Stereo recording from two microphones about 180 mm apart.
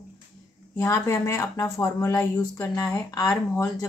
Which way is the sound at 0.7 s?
15° left (ahead or behind).